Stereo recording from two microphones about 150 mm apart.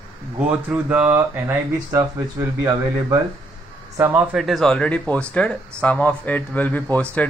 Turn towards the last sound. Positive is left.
turn(degrees=10)  # may be behind; listen again after turning